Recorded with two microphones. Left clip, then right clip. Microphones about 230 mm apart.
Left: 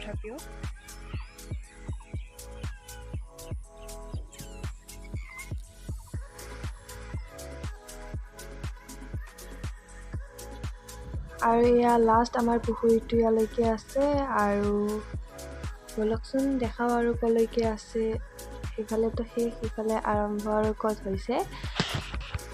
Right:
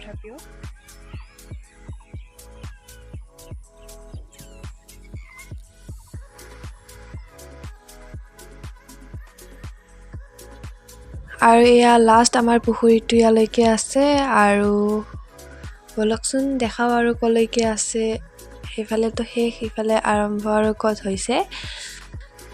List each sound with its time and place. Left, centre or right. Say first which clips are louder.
0.0 s music: even; centre
11.3 s speech: right 10 dB; right
15.3 s music: even; centre
16.0 s speech: right 7 dB; right
18.3 s music: right 1 dB; centre
18.8 s speech: right 6 dB; right